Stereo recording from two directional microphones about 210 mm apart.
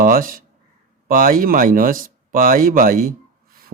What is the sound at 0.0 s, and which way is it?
Speech, 40° right (ahead or behind).